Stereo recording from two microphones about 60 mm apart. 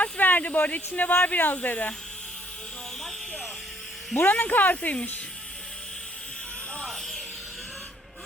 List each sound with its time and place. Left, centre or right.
0.0 s speech: left
4.2 s speech: left